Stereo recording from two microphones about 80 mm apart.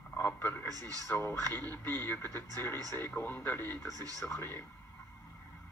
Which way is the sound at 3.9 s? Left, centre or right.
Right.